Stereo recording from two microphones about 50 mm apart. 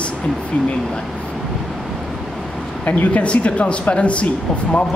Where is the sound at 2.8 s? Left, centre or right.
Left.